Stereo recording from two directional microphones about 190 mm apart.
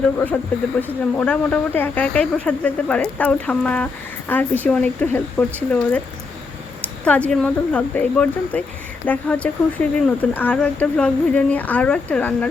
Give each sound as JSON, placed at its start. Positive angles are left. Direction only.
{"t": 0.8, "sound": "speech", "side_deg": 10}
{"t": 7.0, "sound": "speech", "side_deg": 5}